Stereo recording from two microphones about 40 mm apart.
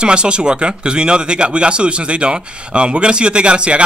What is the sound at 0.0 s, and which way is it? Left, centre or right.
A man's voice, right.